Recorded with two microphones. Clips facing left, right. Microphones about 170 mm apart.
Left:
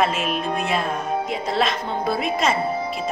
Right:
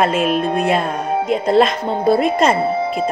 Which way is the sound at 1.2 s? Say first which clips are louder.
Right 14 dB; 50° right (ahead or behind).